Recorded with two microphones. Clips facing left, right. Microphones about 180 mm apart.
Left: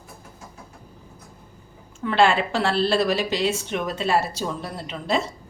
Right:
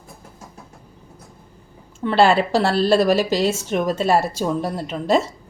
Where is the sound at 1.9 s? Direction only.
40° right (ahead or behind).